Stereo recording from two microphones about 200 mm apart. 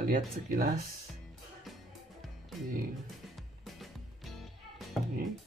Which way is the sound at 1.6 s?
Centre (ahead or behind).